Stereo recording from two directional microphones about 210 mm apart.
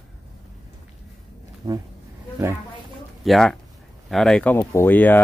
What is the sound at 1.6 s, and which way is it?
Speech, 15° right (ahead or behind).